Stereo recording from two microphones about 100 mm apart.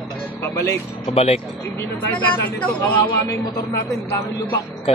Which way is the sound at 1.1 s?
90° left.